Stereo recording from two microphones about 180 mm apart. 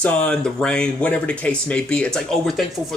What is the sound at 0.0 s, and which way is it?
Speech, 5° left (ahead or behind).